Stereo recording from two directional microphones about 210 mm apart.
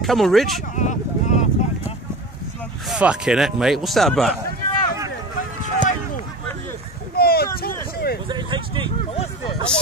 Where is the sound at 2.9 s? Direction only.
5° right (ahead or behind).